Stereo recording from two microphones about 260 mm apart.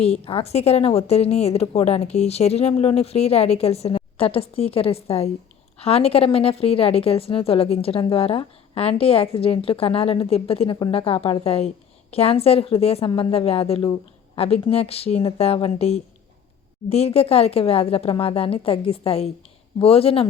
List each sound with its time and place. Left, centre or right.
0.0 s a woman's voice: left